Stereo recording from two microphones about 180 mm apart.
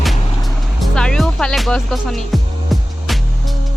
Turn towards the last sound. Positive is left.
turn(degrees=0)  # may be behind; listen again after turning